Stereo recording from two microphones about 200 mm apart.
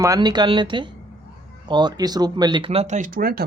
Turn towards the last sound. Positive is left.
turn(degrees=-50)  # may be behind; listen again after turning